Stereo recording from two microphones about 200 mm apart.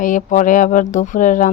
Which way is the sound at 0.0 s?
40° left (ahead or behind).